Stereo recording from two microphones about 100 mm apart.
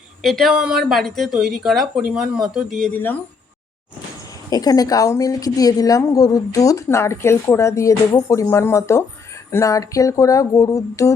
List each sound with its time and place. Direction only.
0.2 s speech: centre (ahead or behind)
2.9 s speech: 15° left (ahead or behind)
4.4 s speech: 40° left (ahead or behind)